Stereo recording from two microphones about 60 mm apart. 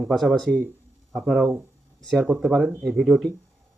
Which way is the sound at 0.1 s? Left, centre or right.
Centre.